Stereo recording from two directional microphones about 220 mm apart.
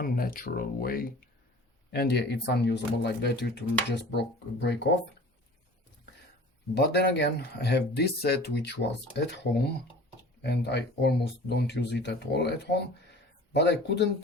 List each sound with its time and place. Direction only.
0.0 s speech: 40° left (ahead or behind)
6.7 s speech: 50° left (ahead or behind)